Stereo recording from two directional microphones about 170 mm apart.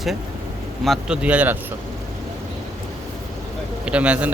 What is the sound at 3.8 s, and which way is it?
Speech, 5° right (ahead or behind).